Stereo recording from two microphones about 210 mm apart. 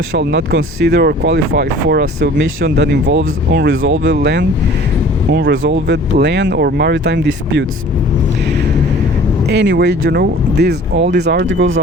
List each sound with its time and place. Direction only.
0.1 s speech: 55° right (ahead or behind)
9.5 s speech: 50° right (ahead or behind)